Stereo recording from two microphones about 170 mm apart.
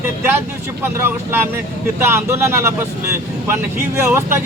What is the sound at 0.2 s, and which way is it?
Speech, 15° right (ahead or behind).